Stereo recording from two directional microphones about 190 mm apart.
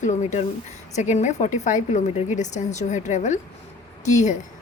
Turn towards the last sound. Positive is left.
turn(degrees=40)  # may be behind; listen again after turning